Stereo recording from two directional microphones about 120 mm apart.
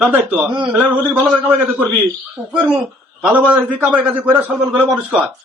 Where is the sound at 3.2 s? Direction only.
15° right (ahead or behind).